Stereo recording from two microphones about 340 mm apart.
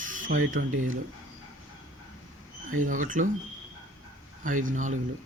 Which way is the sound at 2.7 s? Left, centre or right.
Right.